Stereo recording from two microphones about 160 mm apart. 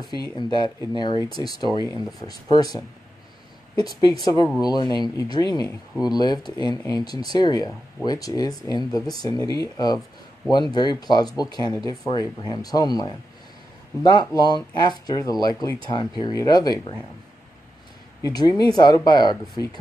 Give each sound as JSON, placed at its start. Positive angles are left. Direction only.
{"t": 0.1, "sound": "speech", "side_deg": 25}
{"t": 4.2, "sound": "speech", "side_deg": 25}
{"t": 18.2, "sound": "speech", "side_deg": 25}